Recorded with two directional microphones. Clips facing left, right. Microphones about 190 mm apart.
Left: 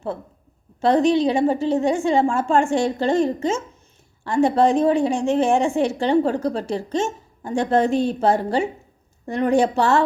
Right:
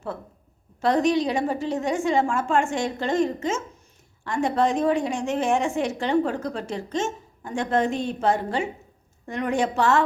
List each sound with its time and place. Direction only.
0.8 s a woman's voice: 30° left (ahead or behind)